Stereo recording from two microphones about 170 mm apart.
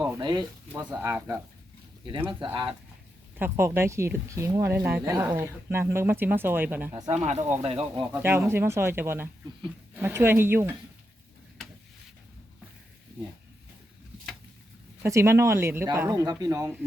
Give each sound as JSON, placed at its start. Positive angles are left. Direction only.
{"t": 0.2, "sound": "speech", "side_deg": -25}
{"t": 0.9, "sound": "speech", "side_deg": -10}
{"t": 2.4, "sound": "speech", "side_deg": -30}
{"t": 3.3, "sound": "speech", "side_deg": -15}
{"t": 7.1, "sound": "speech", "side_deg": -40}
{"t": 8.1, "sound": "speech", "side_deg": -15}
{"t": 15.0, "sound": "speech", "side_deg": -15}